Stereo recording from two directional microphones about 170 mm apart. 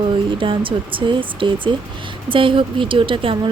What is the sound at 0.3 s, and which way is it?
Speech, 30° right (ahead or behind).